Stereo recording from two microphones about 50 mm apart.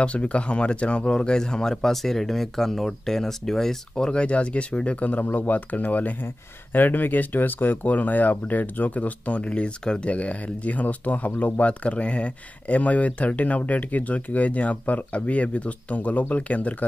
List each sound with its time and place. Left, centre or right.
0.0 s speech: left